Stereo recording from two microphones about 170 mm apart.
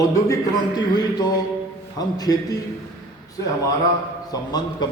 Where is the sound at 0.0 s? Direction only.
25° left (ahead or behind).